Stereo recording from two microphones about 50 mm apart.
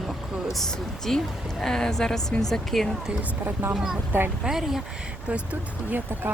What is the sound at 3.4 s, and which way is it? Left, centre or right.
Speech, right.